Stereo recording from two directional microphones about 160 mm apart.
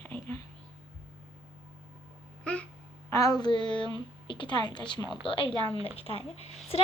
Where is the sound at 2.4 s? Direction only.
5° left (ahead or behind).